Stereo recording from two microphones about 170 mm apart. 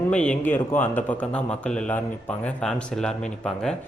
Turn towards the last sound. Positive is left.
turn(degrees=5)  # may be behind; listen again after turning